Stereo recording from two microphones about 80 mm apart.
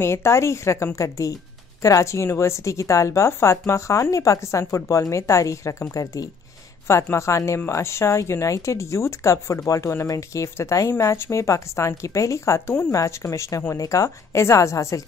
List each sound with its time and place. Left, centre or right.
0.0 s a woman's voice: left